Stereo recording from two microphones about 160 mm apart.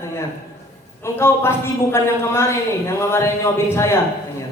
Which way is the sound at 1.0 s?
15° left (ahead or behind).